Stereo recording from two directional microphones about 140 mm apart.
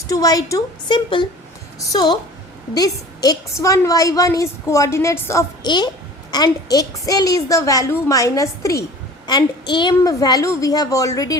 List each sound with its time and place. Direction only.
0.1 s a woman's voice: 25° left (ahead or behind)
5.6 s a child's voice: 30° left (ahead or behind)